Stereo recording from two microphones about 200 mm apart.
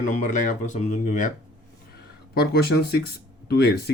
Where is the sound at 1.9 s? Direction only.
55° left (ahead or behind).